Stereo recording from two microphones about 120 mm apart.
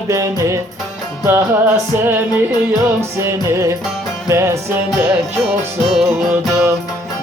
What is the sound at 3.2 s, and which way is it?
Music, 25° right (ahead or behind).